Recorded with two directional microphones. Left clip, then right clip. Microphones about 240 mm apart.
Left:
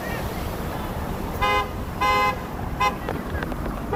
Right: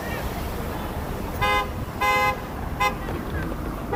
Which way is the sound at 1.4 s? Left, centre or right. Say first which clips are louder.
Even; right.